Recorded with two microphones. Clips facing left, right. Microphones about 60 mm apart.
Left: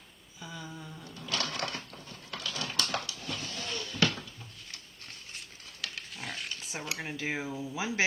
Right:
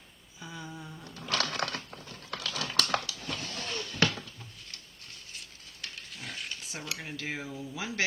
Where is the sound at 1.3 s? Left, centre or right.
Right.